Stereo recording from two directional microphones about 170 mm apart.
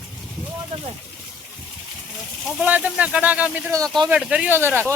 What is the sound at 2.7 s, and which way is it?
Speech, 10° right (ahead or behind).